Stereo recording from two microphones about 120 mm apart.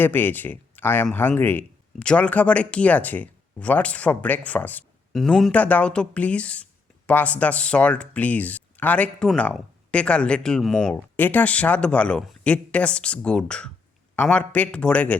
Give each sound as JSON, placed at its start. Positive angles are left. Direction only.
{"t": 0.0, "sound": "speech", "side_deg": 15}
{"t": 5.1, "sound": "speech", "side_deg": 5}
{"t": 10.9, "sound": "speech", "side_deg": 15}